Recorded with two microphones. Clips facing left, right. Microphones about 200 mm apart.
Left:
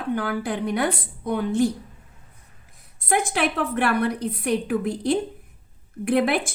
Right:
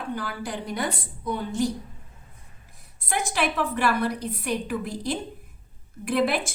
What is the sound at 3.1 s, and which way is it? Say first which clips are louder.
A woman's voice: left 4 dB; 55° left (ahead or behind).